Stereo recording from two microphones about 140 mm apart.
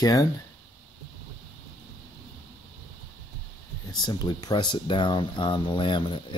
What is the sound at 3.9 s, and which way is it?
Speech, 30° left (ahead or behind).